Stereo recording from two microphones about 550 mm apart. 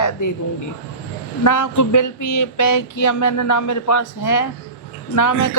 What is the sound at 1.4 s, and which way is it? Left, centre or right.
Speech, left.